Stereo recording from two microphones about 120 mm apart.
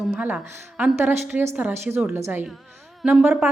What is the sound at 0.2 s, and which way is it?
A woman's voice, 15° right (ahead or behind).